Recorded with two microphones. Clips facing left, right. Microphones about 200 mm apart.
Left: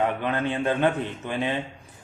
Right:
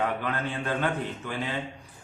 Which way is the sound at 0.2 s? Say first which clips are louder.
Left 5 dB; 20° left (ahead or behind).